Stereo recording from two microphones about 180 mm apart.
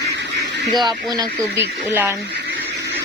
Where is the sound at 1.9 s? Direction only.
10° right (ahead or behind).